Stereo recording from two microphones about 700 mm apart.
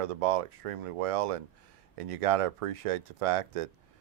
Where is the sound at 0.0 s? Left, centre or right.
Right.